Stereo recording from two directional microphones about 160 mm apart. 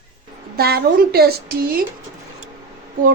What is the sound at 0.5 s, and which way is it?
A woman's voice, 75° right (ahead or behind).